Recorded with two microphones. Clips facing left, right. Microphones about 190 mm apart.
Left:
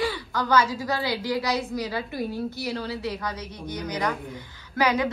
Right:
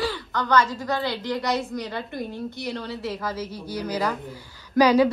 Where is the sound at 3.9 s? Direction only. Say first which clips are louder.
Right 1 dB; 5° right (ahead or behind).